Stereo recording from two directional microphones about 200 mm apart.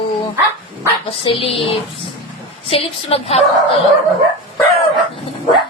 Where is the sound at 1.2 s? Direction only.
25° left (ahead or behind).